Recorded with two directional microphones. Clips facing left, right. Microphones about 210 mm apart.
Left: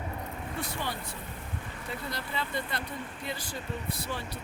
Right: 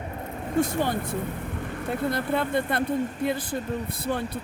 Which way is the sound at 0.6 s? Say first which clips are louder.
Right 12 dB; 45° right (ahead or behind).